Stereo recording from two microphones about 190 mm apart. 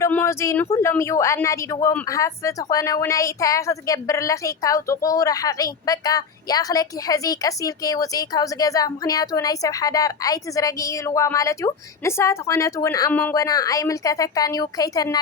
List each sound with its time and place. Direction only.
0.0 s a woman's voice: 10° left (ahead or behind)